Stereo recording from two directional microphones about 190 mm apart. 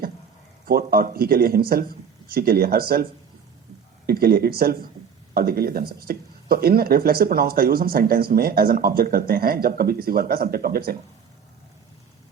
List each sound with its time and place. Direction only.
0.6 s speech: 50° right (ahead or behind)